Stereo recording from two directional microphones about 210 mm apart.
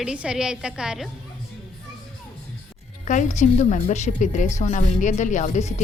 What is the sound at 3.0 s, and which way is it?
Speech, 35° left (ahead or behind).